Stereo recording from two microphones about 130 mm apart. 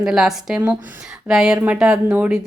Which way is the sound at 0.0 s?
5° right (ahead or behind).